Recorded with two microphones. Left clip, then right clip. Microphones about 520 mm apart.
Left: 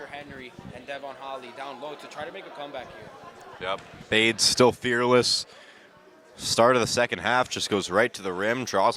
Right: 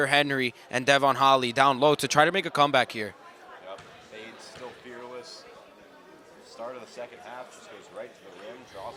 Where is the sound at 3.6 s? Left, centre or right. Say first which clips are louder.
Left 13 dB; left.